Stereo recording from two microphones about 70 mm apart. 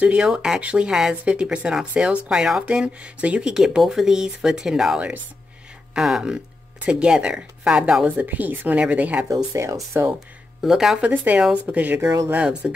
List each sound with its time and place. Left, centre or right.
0.0 s speech: centre
9.3 s speech: right
10.6 s speech: centre
11.0 s speech: right
12.0 s speech: right
12.3 s speech: centre